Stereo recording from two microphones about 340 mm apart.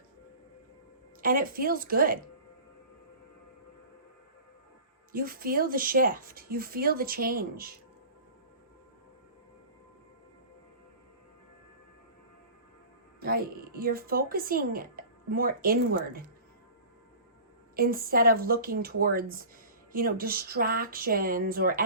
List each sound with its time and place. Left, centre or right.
1.2 s speech: right
5.1 s speech: right
13.1 s speech: right
17.7 s speech: right